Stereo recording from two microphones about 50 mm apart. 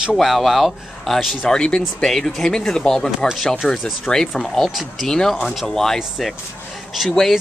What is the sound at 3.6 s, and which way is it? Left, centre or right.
Speech, centre.